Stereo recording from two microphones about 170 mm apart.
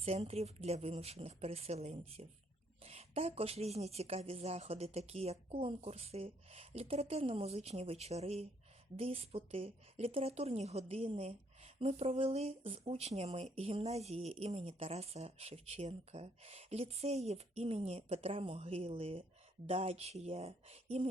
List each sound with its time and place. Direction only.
0.0 s speech: 35° right (ahead or behind)